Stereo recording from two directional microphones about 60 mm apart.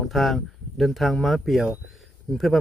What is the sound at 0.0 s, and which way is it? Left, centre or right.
Speech, centre.